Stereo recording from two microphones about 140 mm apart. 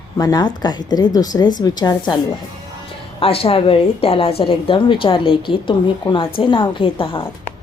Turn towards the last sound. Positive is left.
turn(degrees=40)  # may be behind; listen again after turning